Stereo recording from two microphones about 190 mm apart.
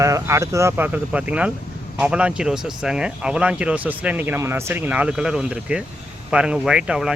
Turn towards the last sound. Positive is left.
turn(degrees=-5)  # may be behind; listen again after turning